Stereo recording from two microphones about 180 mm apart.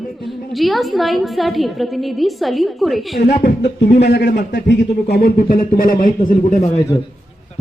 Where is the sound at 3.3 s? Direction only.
65° left (ahead or behind); by 6.8 s 40° left (ahead or behind).